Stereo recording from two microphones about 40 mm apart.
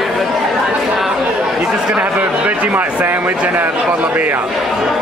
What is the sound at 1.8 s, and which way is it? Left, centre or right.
Speech, right.